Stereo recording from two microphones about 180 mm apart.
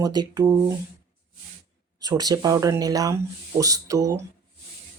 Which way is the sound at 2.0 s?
20° right (ahead or behind).